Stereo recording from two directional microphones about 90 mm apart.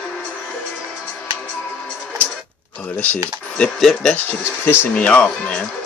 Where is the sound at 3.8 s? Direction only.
Centre (ahead or behind).